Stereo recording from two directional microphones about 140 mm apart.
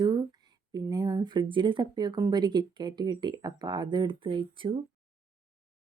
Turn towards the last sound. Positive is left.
turn(degrees=-35)  # may be behind; listen again after turning